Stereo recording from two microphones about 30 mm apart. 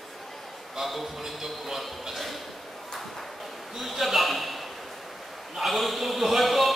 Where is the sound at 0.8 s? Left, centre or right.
Centre.